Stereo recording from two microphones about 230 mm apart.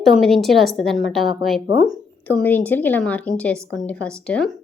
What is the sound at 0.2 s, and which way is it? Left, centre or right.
A woman's voice, centre.